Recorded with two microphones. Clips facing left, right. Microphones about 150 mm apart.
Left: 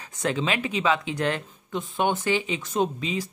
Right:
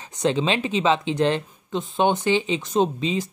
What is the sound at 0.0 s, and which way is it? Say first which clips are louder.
Speech: right 5 dB; 20° right (ahead or behind).